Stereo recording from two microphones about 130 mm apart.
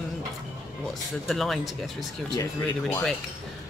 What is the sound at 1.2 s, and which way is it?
Speech, centre (ahead or behind).